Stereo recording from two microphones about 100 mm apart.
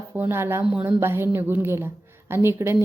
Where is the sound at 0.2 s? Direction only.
20° right (ahead or behind).